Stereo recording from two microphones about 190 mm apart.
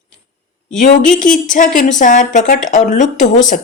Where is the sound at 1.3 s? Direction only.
45° left (ahead or behind).